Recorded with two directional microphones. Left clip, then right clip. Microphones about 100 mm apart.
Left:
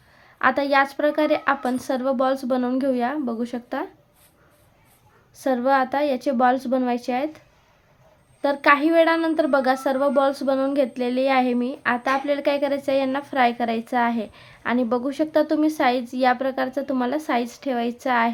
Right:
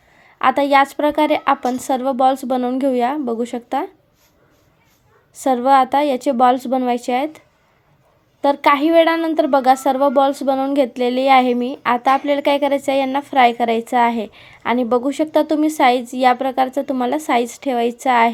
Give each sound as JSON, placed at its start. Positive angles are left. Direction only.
{"t": 0.3, "sound": "a woman's voice", "side_deg": -30}
{"t": 5.4, "sound": "a woman's voice", "side_deg": -35}